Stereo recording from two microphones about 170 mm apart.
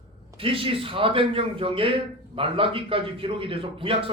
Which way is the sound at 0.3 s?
30° right (ahead or behind).